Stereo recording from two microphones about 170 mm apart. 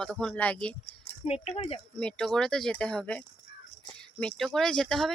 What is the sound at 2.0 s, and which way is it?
Speech, 5° left (ahead or behind).